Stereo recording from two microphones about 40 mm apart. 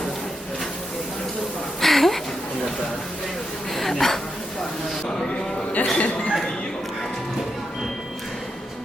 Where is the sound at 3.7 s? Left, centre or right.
Centre.